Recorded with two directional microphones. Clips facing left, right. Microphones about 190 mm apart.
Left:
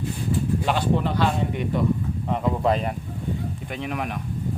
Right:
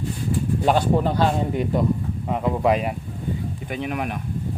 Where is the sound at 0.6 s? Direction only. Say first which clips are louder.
Right 8 dB; 40° right (ahead or behind).